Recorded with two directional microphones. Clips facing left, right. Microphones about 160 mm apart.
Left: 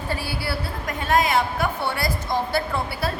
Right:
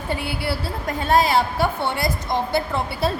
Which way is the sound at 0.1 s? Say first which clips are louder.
Right 3 dB; 20° right (ahead or behind).